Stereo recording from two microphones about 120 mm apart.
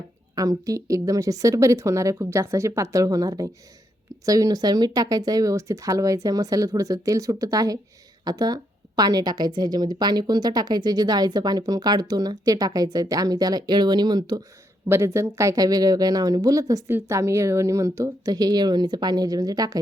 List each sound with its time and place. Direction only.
0.3 s a woman's voice: 30° right (ahead or behind)
14.8 s a woman's voice: 25° right (ahead or behind)